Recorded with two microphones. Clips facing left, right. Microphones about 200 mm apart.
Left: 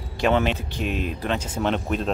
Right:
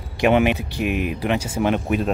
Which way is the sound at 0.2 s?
15° right (ahead or behind).